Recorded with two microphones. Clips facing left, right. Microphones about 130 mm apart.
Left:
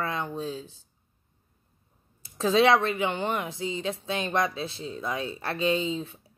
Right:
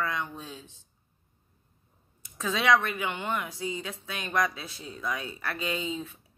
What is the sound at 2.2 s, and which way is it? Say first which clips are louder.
Speech: left 6 dB; 30° left (ahead or behind).